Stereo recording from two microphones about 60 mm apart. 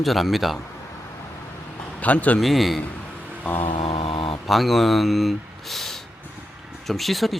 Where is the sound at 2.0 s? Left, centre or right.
Left.